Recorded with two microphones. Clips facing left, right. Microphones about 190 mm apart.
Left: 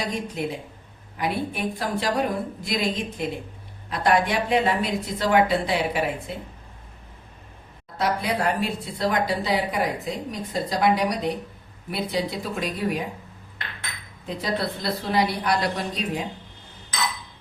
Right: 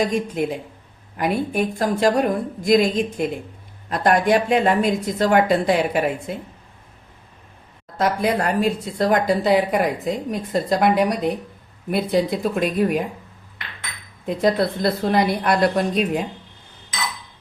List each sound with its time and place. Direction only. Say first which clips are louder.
0.4 s speech: right 5 dB; 50° right (ahead or behind)
7.9 s speech: right 5 dB; 45° right (ahead or behind)
14.3 s speech: right 8 dB; 50° right (ahead or behind)